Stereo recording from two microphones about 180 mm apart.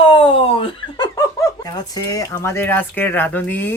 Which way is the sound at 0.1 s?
30° left (ahead or behind).